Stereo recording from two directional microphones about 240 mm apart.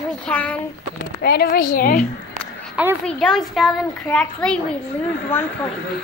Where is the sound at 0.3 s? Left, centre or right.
Centre.